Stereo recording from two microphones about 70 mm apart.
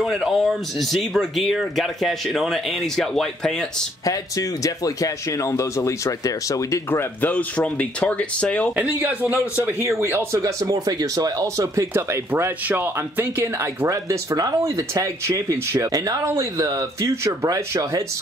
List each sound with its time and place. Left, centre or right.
0.0 s speech: centre
4.0 s a man's voice: left
6.9 s speech: left
8.7 s speech: right
10.3 s speech: right
11.9 s speech: right
13.8 s speech: right
17.1 s speech: right
17.5 s speech: right